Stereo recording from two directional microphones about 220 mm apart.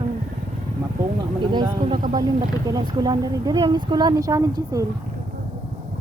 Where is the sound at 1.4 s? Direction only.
20° right (ahead or behind).